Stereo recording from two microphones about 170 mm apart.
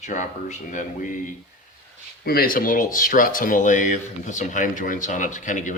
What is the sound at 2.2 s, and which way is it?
Speech, 60° left (ahead or behind).